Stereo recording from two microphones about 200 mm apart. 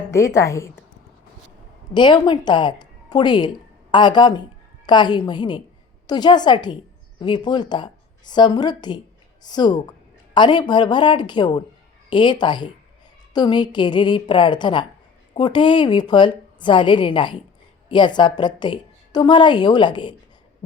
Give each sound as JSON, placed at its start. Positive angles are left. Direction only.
{"t": 0.1, "sound": "a woman's voice", "side_deg": 15}
{"t": 1.9, "sound": "a woman's voice", "side_deg": 20}